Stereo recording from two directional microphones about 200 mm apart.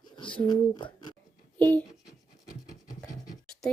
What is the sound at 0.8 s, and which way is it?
Speech, 25° left (ahead or behind).